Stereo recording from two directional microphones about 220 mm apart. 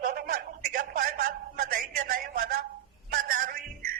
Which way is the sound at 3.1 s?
40° right (ahead or behind).